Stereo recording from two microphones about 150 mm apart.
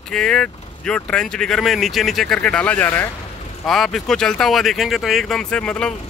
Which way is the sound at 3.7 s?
Centre (ahead or behind).